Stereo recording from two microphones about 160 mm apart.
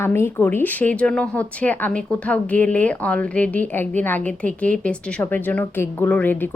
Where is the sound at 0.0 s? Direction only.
15° left (ahead or behind).